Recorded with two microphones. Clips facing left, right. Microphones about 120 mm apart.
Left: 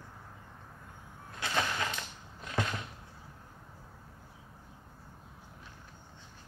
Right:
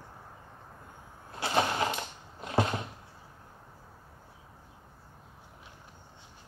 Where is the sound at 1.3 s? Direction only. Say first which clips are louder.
Right 5 dB; 30° right (ahead or behind).